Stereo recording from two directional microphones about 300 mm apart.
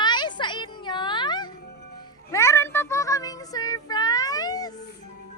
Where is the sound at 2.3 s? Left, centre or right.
Centre.